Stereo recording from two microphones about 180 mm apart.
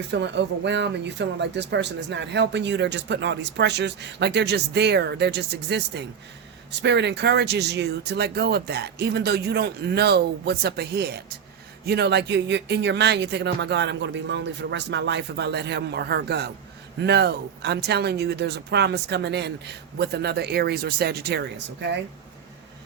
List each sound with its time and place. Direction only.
0.1 s speech: 75° right (ahead or behind)